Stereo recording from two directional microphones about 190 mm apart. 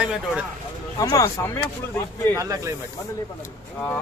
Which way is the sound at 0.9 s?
20° left (ahead or behind).